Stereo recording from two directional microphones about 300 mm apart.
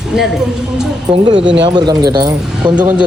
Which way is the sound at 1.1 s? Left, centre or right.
Centre.